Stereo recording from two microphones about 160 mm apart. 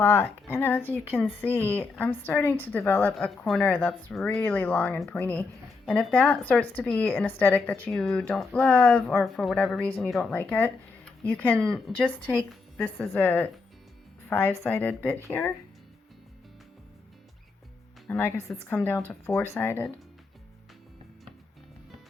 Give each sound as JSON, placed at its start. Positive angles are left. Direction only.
{"t": 0.0, "sound": "speech", "side_deg": 15}
{"t": 10.3, "sound": "speech", "side_deg": 10}
{"t": 18.1, "sound": "speech", "side_deg": 15}